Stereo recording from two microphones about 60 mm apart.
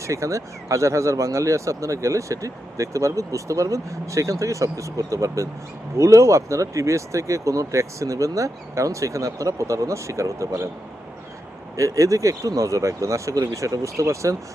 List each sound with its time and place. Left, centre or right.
0.0 s speech: right
11.8 s speech: right